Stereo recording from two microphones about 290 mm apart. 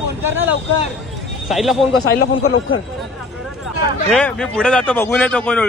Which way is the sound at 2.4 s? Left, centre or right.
Left.